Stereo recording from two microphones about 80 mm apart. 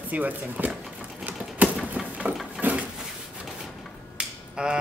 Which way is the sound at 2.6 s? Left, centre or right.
Centre.